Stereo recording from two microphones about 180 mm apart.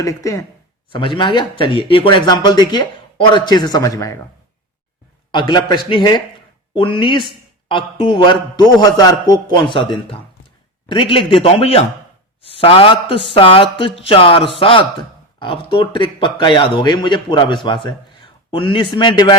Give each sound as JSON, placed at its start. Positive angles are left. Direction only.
{"t": 0.0, "sound": "speech", "side_deg": 20}
{"t": 5.3, "sound": "speech", "side_deg": 25}